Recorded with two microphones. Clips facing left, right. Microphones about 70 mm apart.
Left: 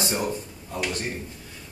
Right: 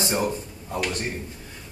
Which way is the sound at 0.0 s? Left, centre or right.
Right.